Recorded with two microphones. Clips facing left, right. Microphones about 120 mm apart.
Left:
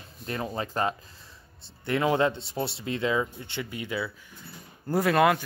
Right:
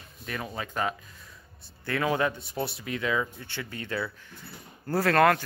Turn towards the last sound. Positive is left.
turn(degrees=10)  # may be behind; listen again after turning